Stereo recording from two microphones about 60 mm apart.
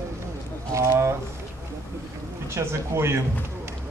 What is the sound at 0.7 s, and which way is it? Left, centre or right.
Speech, right.